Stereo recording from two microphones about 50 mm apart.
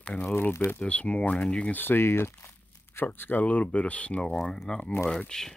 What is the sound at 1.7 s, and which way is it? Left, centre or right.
Speech, left.